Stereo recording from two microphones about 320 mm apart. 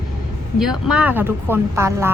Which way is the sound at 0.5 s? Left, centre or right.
Centre.